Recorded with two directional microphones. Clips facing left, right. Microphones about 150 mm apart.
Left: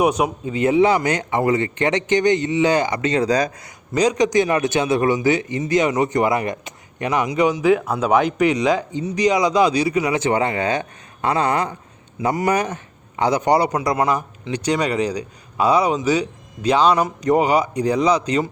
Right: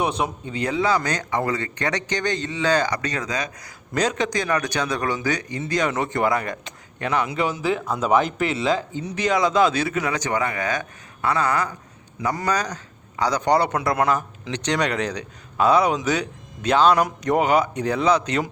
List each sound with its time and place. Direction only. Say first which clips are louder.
0.2 s a man's voice: left 6 dB; 10° left (ahead or behind); by 3.7 s 35° left (ahead or behind)
3.9 s a man's voice: left 6 dB; 10° left (ahead or behind)
10.2 s a man's voice: left 5 dB; 25° left (ahead or behind)